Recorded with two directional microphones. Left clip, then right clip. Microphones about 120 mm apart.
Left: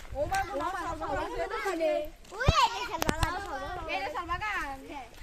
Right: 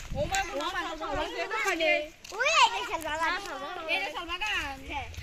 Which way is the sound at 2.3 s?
90° right.